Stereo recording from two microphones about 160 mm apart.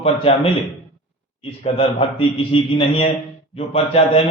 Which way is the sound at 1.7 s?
35° left (ahead or behind).